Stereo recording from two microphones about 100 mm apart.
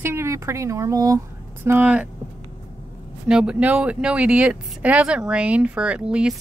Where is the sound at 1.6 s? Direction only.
20° right (ahead or behind).